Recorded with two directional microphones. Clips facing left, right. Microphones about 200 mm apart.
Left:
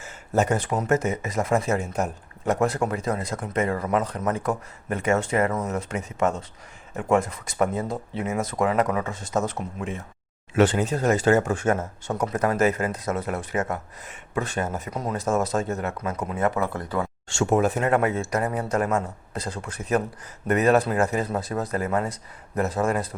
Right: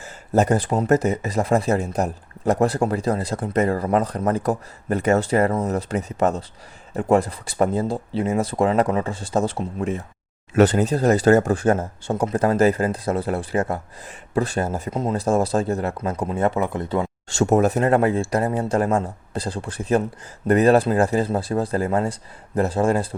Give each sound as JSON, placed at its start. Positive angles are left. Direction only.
{"t": 0.0, "sound": "speech", "side_deg": -35}
{"t": 17.2, "sound": "speech", "side_deg": -40}